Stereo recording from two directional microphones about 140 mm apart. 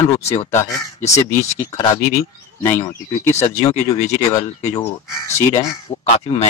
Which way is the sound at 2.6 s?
20° left (ahead or behind).